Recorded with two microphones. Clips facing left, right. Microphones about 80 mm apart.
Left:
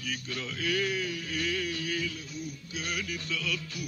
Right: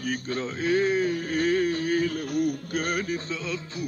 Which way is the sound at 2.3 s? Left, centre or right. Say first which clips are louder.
Right 13 dB; right.